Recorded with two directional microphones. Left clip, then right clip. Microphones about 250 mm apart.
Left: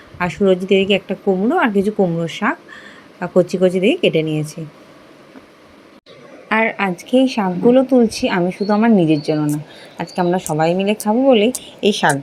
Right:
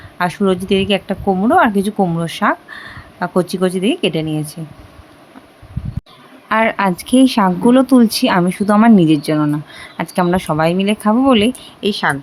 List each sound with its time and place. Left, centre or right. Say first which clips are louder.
0.2 s a woman's voice: even; centre
6.5 s a woman's voice: right 3 dB; centre
6.9 s a woman's voice: right 1 dB; right
7.2 s speech: right 3 dB; right